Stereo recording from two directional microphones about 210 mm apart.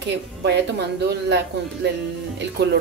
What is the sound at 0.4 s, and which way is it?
Speech, 50° right (ahead or behind).